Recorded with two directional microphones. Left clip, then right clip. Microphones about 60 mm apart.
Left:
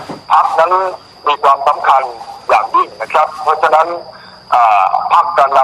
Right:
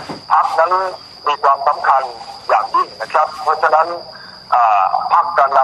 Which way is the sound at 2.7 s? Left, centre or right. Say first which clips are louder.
Left 3 dB; left.